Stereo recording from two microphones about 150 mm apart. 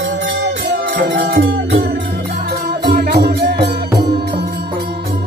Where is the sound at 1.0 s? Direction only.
90° right.